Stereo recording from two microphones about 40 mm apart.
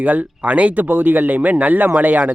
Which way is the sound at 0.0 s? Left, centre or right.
Right.